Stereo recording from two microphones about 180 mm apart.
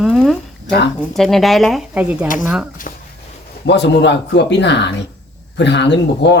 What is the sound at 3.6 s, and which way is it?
Speech, 75° left (ahead or behind).